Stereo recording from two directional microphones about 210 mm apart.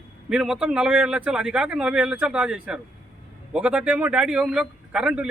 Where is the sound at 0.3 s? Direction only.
5° right (ahead or behind).